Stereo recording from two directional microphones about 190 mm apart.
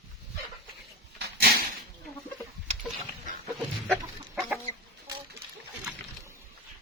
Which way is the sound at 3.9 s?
Centre (ahead or behind).